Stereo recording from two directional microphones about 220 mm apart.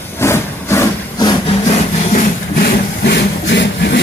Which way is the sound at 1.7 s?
30° left (ahead or behind).